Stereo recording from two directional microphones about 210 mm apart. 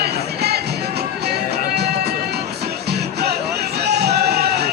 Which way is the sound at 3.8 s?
50° right (ahead or behind).